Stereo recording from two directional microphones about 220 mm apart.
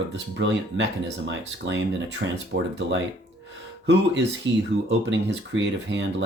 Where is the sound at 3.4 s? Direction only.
55° right (ahead or behind).